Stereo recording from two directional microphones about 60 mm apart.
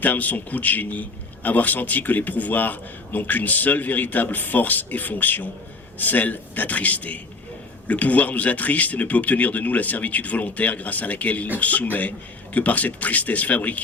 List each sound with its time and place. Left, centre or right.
0.0 s a man's voice: left